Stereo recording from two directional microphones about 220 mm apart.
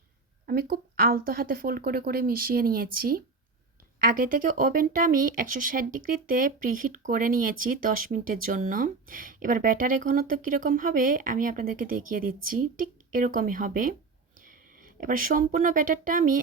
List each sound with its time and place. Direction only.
0.4 s speech: 45° right (ahead or behind)